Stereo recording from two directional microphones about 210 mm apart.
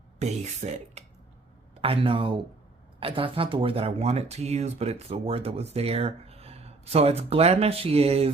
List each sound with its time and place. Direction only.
0.2 s speech: 30° right (ahead or behind)